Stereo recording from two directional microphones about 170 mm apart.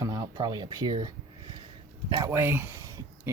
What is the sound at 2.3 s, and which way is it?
Speech, 15° right (ahead or behind).